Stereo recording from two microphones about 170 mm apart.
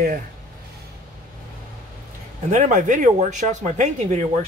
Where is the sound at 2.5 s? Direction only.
45° right (ahead or behind).